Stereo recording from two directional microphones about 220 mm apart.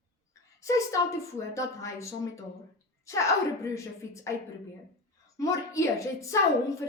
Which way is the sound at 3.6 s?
15° left (ahead or behind).